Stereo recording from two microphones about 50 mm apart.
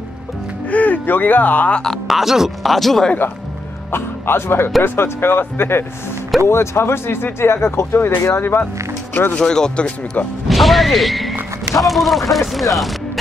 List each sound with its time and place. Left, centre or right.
0.7 s speech: left
2.0 s speech: centre
3.9 s a man's voice: left
6.4 s speech: left
9.4 s speech: centre
10.5 s speech: centre